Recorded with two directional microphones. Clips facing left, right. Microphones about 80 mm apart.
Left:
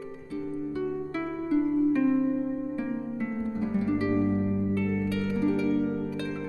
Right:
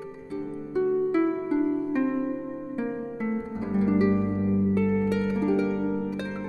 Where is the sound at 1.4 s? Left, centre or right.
Right.